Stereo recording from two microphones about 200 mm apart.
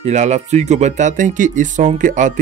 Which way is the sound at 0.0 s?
35° right (ahead or behind).